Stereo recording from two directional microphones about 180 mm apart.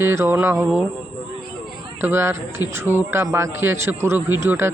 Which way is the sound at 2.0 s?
15° right (ahead or behind).